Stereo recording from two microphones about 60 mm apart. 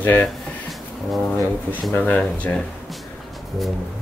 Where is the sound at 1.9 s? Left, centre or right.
Left.